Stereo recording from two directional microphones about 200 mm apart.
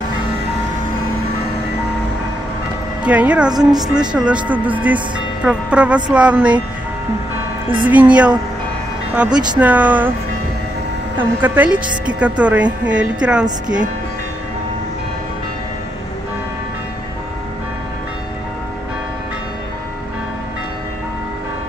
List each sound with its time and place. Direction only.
3.0 s speech: 5° right (ahead or behind)
3.5 s speech: 20° right (ahead or behind)
4.3 s a woman's voice: 5° right (ahead or behind)
7.8 s a woman's voice: 10° right (ahead or behind)
11.1 s a woman's voice: 10° right (ahead or behind)